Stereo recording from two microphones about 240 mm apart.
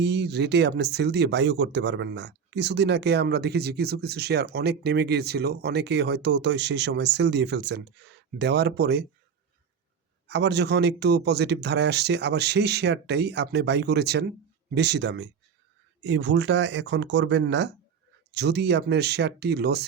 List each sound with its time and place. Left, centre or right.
0.0 s speech: right
10.2 s speech: right